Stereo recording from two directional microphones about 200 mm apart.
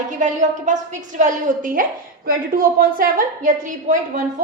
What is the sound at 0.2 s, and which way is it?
A woman's voice, 40° right (ahead or behind).